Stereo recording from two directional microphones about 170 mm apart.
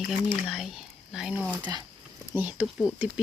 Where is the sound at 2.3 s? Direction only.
10° right (ahead or behind).